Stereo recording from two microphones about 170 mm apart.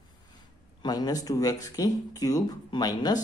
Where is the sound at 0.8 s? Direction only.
25° left (ahead or behind).